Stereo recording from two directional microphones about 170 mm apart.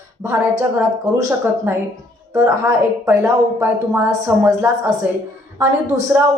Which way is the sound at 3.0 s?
15° right (ahead or behind).